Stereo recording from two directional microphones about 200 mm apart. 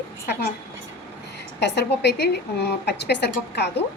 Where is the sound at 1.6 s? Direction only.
60° left (ahead or behind).